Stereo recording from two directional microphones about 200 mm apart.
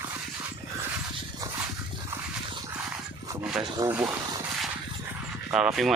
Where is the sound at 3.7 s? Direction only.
15° right (ahead or behind).